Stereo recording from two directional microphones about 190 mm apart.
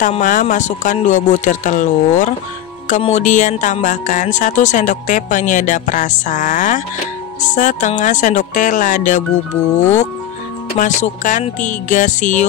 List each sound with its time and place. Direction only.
0.0 s speech: 45° left (ahead or behind)
10.8 s speech: 40° left (ahead or behind)